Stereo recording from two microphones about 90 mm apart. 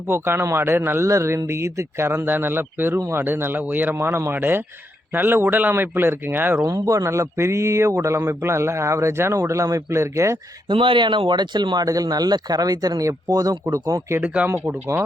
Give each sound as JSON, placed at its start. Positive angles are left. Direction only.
{"t": 0.1, "sound": "a man's voice", "side_deg": -30}
{"t": 6.6, "sound": "speech", "side_deg": -40}
{"t": 10.7, "sound": "speech", "side_deg": -70}
{"t": 11.9, "sound": "speech", "side_deg": -45}
{"t": 14.2, "sound": "a man's voice", "side_deg": -15}